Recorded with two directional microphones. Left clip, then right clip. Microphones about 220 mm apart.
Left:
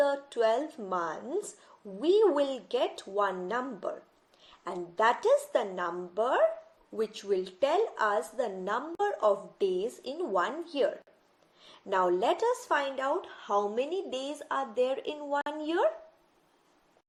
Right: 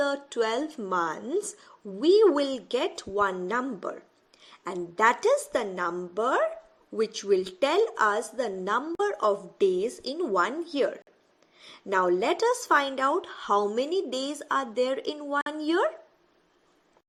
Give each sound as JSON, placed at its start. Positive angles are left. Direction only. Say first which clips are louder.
{"t": 0.0, "sound": "a woman's voice", "louder": "even", "side_deg": -30}